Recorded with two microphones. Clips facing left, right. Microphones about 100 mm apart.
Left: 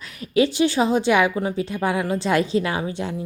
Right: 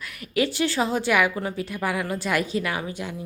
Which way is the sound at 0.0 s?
25° left (ahead or behind).